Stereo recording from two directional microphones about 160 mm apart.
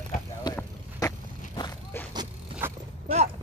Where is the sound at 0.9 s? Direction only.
25° left (ahead or behind).